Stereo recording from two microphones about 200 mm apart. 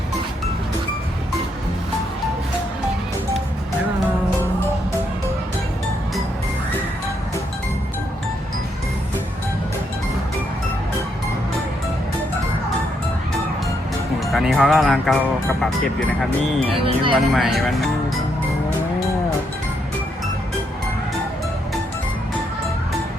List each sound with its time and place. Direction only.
14.3 s speech: centre (ahead or behind)
16.8 s speech: 25° right (ahead or behind)
17.2 s speech: centre (ahead or behind)